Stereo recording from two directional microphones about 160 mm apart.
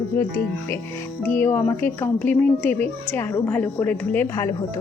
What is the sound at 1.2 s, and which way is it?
Speech, 15° left (ahead or behind).